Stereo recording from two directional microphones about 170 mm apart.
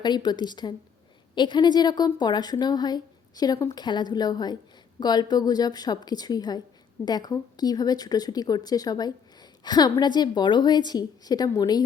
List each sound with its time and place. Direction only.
0.0 s speech: 25° left (ahead or behind)